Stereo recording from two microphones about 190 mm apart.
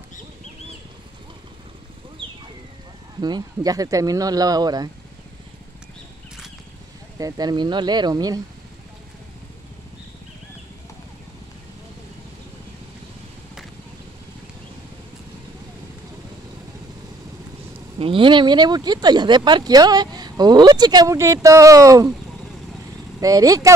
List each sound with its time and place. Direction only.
3.2 s speech: 20° right (ahead or behind)
7.2 s speech: 20° right (ahead or behind)
17.9 s speech: 30° right (ahead or behind)
23.2 s speech: 20° right (ahead or behind)